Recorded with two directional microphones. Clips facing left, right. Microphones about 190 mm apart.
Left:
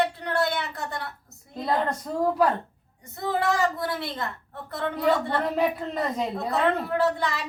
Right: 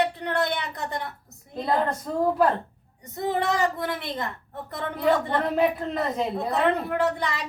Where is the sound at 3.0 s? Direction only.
20° right (ahead or behind).